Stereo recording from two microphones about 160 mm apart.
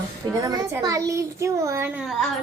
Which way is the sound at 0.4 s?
20° right (ahead or behind).